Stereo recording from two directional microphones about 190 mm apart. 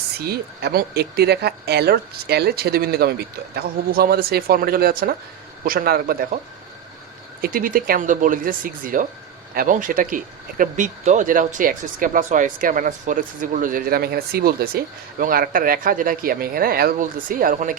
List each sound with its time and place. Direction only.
0.3 s speech: 55° right (ahead or behind)
7.4 s speech: 50° right (ahead or behind)